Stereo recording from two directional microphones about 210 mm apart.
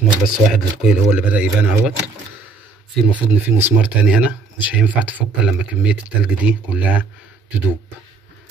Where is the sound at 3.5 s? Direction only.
10° right (ahead or behind).